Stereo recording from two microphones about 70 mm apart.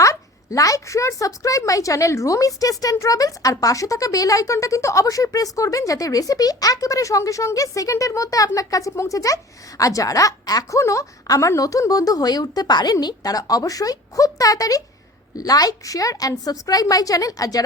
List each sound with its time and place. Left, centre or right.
0.0 s a woman's voice: left